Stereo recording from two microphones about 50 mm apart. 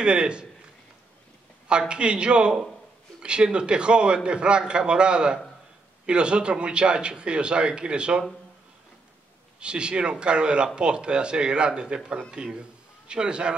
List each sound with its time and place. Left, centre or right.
0.0 s speech: centre
1.7 s speech: centre
9.6 s speech: centre